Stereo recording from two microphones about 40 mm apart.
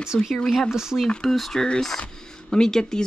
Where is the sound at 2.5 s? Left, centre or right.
Centre.